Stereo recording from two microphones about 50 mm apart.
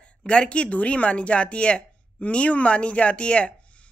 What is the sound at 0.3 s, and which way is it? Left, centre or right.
Speech, left.